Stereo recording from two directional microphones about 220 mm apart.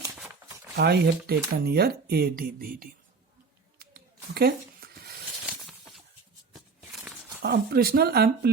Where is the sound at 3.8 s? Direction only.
45° right (ahead or behind).